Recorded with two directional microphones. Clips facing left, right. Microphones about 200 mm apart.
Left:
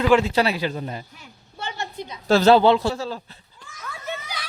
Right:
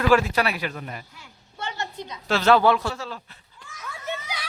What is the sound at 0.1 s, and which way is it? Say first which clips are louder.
A man's voice: left 1 dB; 25° left (ahead or behind).